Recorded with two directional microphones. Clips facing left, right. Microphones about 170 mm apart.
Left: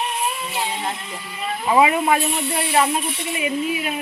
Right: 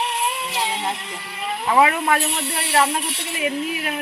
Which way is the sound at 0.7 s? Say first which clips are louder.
Right 1 dB; 25° right (ahead or behind).